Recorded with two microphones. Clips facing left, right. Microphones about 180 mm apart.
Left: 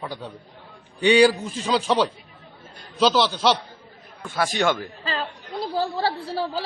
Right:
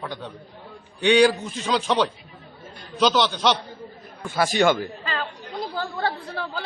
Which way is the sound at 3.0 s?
5° left (ahead or behind).